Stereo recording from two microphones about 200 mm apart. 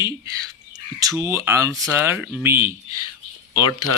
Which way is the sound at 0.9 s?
15° right (ahead or behind).